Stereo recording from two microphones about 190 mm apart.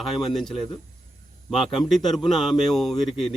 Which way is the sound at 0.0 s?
Centre (ahead or behind).